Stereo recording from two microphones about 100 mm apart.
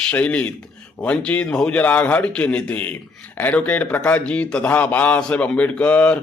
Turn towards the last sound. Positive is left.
turn(degrees=15)  # may be behind; listen again after turning